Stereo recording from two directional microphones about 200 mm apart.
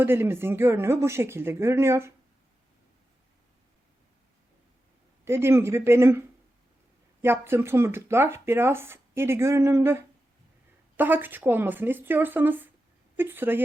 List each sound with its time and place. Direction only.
0.0 s speech: 10° right (ahead or behind)
5.2 s speech: 10° right (ahead or behind)